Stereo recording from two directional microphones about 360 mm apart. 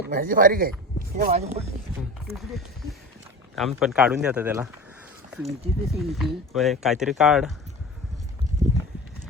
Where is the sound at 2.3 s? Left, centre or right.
Centre.